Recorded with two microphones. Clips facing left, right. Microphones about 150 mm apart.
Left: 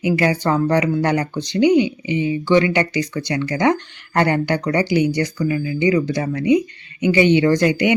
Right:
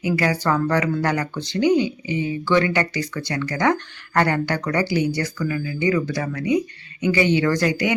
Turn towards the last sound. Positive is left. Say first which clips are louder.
# left 4 dB
turn(degrees=20)  # may be behind; listen again after turning